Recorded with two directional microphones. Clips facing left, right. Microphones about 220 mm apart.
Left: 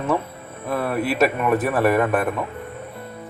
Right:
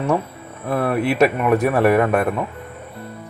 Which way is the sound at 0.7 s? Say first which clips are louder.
Right 3 dB; 10° right (ahead or behind).